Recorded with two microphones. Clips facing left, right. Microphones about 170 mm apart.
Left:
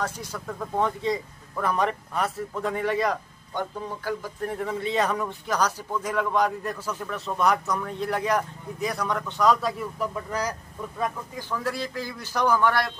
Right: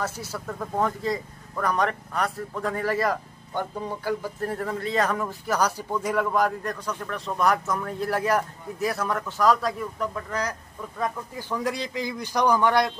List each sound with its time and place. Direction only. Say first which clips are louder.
0.0 s speech: even; 5° right (ahead or behind)
4.6 s speech: left 1 dB; centre (ahead or behind)
11.3 s speech: right 1 dB; 15° right (ahead or behind)